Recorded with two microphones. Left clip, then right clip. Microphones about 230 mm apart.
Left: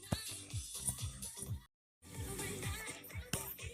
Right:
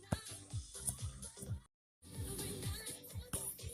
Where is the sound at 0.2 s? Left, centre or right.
Left.